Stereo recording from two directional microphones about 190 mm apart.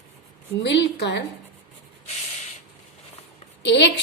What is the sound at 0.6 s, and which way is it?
Speech, 65° left (ahead or behind).